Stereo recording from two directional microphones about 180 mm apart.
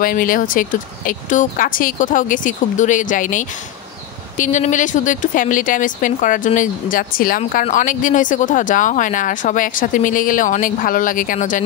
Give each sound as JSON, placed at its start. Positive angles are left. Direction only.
{"t": 0.0, "sound": "speech", "side_deg": 50}